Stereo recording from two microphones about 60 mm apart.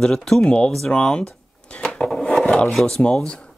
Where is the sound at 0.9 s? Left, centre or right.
Centre.